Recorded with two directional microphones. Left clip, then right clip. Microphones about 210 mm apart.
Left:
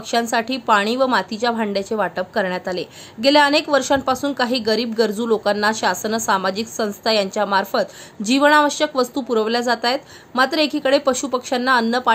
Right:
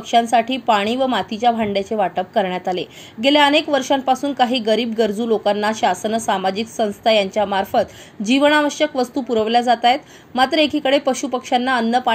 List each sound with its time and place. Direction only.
0.1 s a woman's voice: 5° left (ahead or behind)
2.7 s a woman's voice: 40° left (ahead or behind)
3.3 s a woman's voice: 5° left (ahead or behind)